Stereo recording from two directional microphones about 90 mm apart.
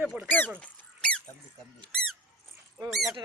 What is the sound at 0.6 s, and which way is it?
Squeak, 10° left (ahead or behind).